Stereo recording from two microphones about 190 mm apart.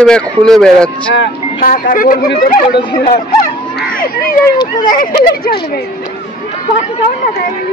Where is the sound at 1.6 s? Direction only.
45° left (ahead or behind).